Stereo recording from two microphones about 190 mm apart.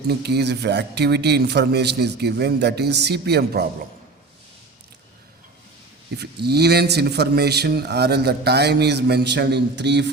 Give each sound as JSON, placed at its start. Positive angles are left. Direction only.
{"t": 0.1, "sound": "speech", "side_deg": -60}
{"t": 6.1, "sound": "speech", "side_deg": -60}